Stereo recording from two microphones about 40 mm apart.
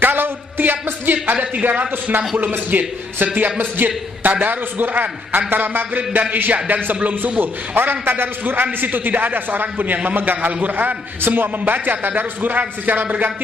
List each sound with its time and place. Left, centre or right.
0.0 s a sound: right
1.7 s a man's voice: right
5.5 s music: right
6.3 s a man's voice: right
8.8 s a man's voice: right